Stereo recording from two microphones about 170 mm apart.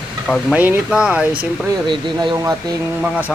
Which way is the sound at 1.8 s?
30° right (ahead or behind).